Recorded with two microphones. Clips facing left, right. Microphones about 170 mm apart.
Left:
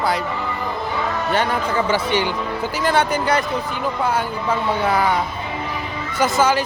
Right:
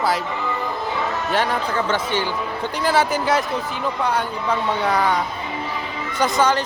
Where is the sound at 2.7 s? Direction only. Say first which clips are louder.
Even; centre (ahead or behind).